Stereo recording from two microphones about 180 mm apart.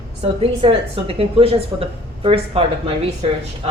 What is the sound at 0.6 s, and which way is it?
A woman's voice, 30° right (ahead or behind).